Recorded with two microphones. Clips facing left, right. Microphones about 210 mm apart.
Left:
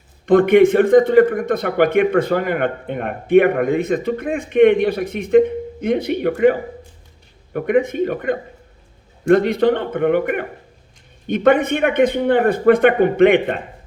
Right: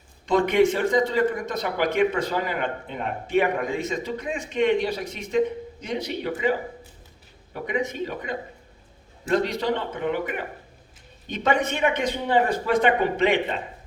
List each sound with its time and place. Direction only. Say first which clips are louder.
0.3 s a man's voice: left 8 dB; 55° left (ahead or behind)